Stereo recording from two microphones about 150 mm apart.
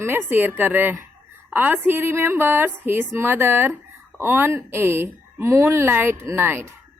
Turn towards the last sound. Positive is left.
turn(degrees=-15)  # may be behind; listen again after turning